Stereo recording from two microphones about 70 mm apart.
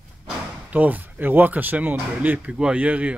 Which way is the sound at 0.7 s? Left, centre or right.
Right.